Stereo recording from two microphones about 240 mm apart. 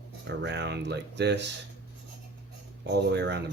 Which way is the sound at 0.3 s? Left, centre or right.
Right.